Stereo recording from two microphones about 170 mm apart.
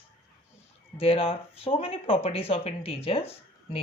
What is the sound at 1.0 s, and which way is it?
Speech, 35° left (ahead or behind).